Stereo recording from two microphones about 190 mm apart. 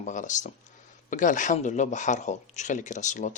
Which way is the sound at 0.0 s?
40° left (ahead or behind).